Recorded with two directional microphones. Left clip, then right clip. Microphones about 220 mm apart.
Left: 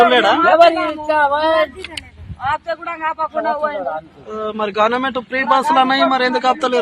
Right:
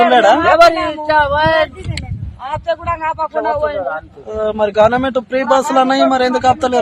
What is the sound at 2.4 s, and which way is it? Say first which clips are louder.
Speech: right 1 dB; 35° right (ahead or behind).